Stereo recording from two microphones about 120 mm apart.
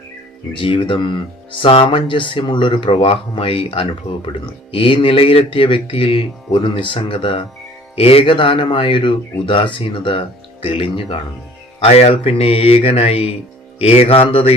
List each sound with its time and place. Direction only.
0.5 s speech: 45° left (ahead or behind)
11.8 s music: 60° left (ahead or behind)